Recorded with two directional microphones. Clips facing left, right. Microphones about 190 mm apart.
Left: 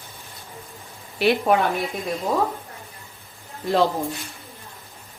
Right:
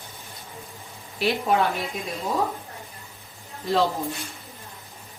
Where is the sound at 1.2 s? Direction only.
65° left (ahead or behind).